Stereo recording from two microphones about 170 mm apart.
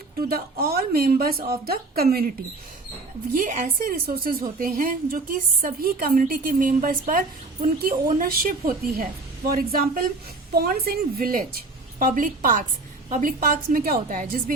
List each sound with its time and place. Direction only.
0.2 s a woman's voice: 60° right (ahead or behind)
3.3 s a woman's voice: 50° right (ahead or behind)